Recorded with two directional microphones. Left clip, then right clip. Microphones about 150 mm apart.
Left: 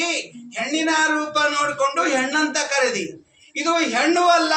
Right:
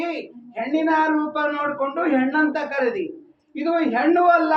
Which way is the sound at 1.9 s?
30° left (ahead or behind).